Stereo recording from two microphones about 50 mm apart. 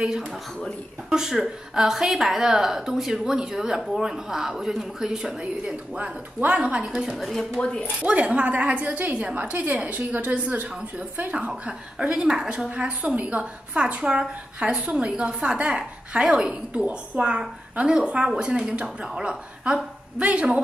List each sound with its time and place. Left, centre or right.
1.1 s a woman's voice: centre
7.2 s speech: centre
8.0 s a woman's voice: right